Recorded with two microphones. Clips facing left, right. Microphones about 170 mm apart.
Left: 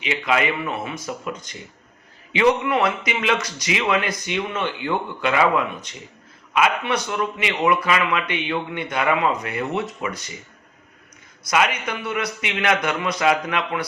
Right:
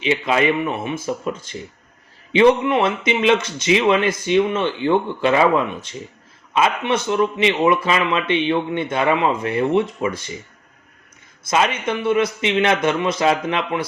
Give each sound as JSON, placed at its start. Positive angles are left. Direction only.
{"t": 0.0, "sound": "a man's voice", "side_deg": -25}
{"t": 11.4, "sound": "a man's voice", "side_deg": -25}